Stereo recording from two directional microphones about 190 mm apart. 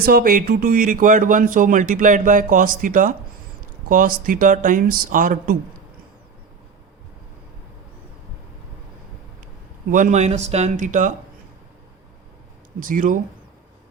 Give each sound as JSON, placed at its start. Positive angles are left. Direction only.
{"t": 0.0, "sound": "speech", "side_deg": -50}
{"t": 9.9, "sound": "speech", "side_deg": -40}
{"t": 12.8, "sound": "speech", "side_deg": -45}